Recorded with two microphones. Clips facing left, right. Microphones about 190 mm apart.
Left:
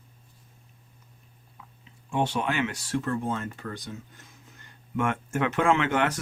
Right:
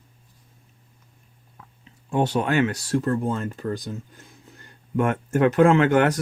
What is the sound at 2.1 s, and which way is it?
Speech, 40° right (ahead or behind).